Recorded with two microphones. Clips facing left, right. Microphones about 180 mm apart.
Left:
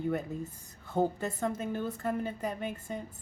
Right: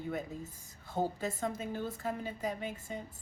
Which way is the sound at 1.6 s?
55° left (ahead or behind).